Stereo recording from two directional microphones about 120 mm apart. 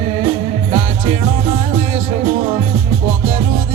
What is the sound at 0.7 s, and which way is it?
Music, 55° right (ahead or behind).